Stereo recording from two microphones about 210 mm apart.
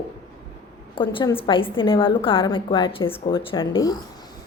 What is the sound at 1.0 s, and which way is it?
A woman's voice, 25° left (ahead or behind).